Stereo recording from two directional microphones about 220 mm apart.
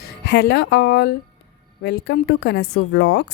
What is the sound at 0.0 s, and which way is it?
A woman's voice, 50° left (ahead or behind).